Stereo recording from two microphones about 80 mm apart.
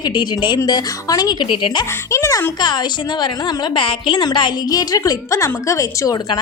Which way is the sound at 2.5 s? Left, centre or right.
Left.